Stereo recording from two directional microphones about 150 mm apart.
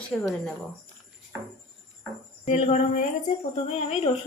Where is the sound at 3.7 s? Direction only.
40° left (ahead or behind).